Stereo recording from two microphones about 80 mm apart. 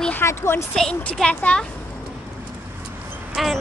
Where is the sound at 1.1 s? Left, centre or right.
Centre.